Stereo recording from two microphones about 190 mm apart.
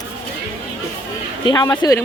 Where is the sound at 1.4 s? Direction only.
20° left (ahead or behind).